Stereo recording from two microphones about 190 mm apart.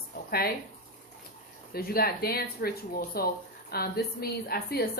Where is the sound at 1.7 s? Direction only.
50° left (ahead or behind).